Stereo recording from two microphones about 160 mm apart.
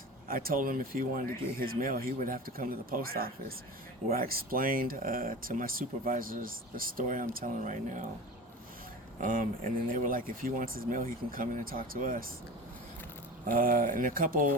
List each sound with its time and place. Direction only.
0.3 s speech: 65° right (ahead or behind)
9.2 s speech: 55° right (ahead or behind)
13.4 s speech: 60° right (ahead or behind)